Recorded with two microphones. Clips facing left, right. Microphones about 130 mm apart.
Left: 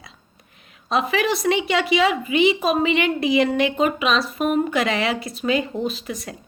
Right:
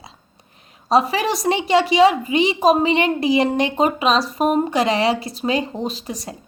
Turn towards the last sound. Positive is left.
turn(degrees=-35)  # may be behind; listen again after turning